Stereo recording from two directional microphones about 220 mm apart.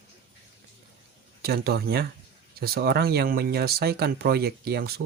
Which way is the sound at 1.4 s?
45° right (ahead or behind).